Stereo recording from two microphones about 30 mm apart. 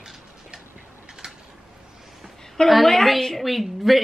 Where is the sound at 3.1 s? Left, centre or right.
Centre.